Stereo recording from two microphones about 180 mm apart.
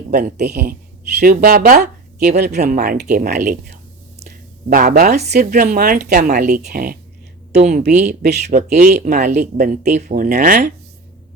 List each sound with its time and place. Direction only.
0.1 s speech: 65° right (ahead or behind)
3.3 s speech: 45° right (ahead or behind)
7.5 s speech: 40° right (ahead or behind)
8.0 s speech: 65° right (ahead or behind); by 10.7 s 45° right (ahead or behind)